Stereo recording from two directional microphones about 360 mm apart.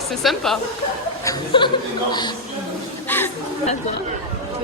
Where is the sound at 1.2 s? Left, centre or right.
Centre.